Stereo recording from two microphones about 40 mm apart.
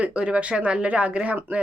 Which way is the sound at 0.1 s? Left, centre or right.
Right.